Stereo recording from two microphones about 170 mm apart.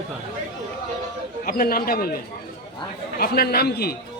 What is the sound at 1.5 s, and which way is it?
Speech, 60° left (ahead or behind).